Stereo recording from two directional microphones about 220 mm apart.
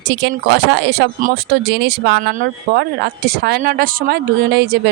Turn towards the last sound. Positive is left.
turn(degrees=-45)  # may be behind; listen again after turning